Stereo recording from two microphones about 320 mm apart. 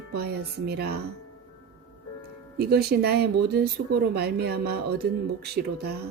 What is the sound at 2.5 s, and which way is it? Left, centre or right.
Speech, right.